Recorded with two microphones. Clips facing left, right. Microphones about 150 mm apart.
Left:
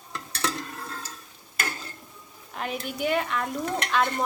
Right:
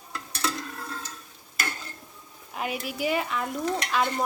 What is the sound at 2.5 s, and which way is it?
Speech, 5° right (ahead or behind).